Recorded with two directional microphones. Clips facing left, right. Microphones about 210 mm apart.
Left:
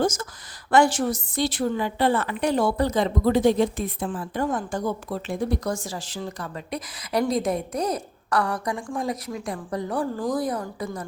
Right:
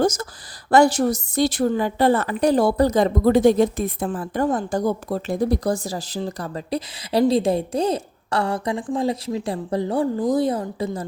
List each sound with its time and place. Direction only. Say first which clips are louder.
0.0 s a woman's voice: right 4 dB; 40° right (ahead or behind)